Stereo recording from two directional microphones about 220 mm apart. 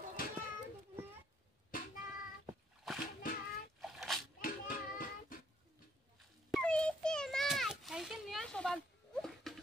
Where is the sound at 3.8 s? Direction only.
Centre (ahead or behind).